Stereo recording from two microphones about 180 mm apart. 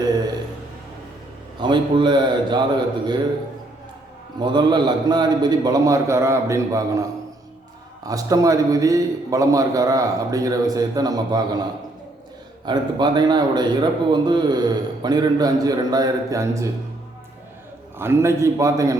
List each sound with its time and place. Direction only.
1.5 s a man's voice: 25° right (ahead or behind)
4.4 s a man's voice: 25° right (ahead or behind)
12.6 s a man's voice: 25° right (ahead or behind)
17.9 s a man's voice: 15° right (ahead or behind)